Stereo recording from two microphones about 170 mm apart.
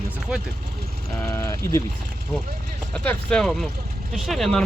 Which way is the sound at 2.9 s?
5° left (ahead or behind).